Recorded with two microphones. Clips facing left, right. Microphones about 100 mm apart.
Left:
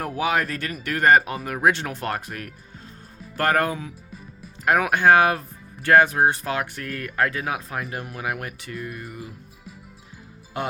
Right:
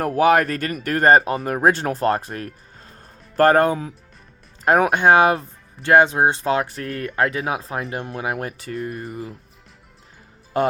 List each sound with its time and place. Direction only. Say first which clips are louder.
0.0 s speech: right 8 dB; 50° right (ahead or behind)
10.5 s speech: right 9 dB; 40° right (ahead or behind)